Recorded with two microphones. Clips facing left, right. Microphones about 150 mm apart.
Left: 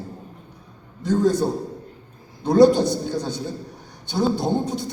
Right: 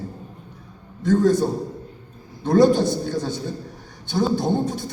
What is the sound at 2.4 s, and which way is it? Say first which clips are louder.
Speech: left 1 dB; 20° left (ahead or behind).